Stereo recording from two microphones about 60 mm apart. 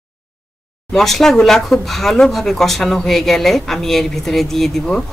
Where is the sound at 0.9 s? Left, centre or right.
Centre.